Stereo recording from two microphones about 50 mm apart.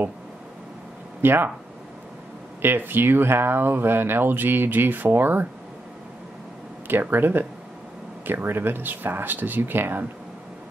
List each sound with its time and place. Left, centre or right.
1.2 s speech: right
2.6 s speech: right
6.9 s speech: right